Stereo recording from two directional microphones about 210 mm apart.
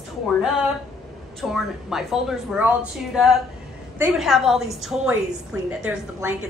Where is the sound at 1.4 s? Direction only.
Centre (ahead or behind).